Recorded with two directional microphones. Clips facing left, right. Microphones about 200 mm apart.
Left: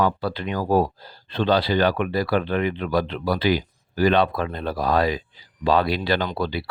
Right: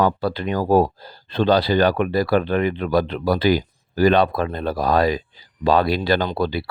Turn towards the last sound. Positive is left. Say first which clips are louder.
# right 3 dB
turn(degrees=-45)  # may be behind; listen again after turning